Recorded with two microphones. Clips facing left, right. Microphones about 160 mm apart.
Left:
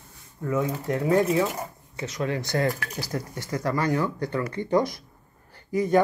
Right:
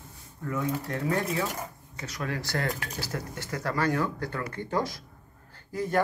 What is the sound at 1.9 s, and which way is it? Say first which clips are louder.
Speech: left 6 dB; 25° left (ahead or behind).